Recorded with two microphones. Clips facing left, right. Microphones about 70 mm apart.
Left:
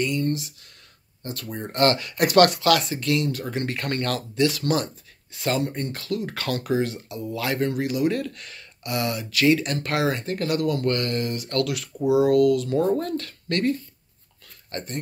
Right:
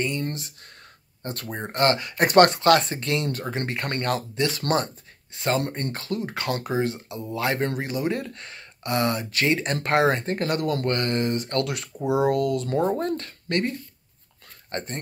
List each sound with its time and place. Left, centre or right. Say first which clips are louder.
1.2 s speech: even; right